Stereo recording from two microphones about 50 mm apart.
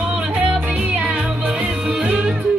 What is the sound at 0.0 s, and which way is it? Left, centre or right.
Music, right.